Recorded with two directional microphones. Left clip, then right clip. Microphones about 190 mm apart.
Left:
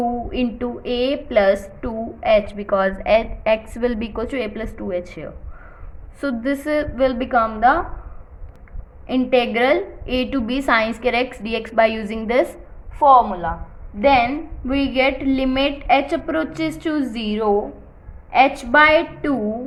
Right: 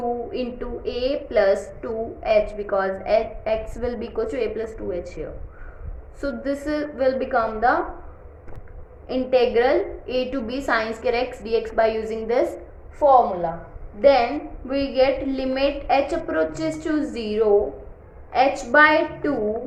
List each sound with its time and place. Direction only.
0.0 s a woman's voice: 35° left (ahead or behind)
9.0 s a woman's voice: 40° left (ahead or behind)
14.0 s a woman's voice: 35° left (ahead or behind)